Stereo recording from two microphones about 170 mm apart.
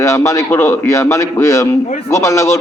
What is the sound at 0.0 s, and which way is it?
A man's voice, 15° left (ahead or behind).